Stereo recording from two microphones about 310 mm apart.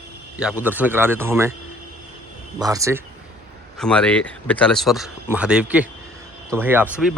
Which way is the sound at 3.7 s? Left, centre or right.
Centre.